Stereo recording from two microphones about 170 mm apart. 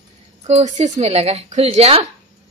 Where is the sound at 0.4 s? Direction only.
40° right (ahead or behind).